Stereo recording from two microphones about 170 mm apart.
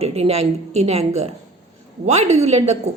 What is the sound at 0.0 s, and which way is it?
A woman's voice, 35° right (ahead or behind).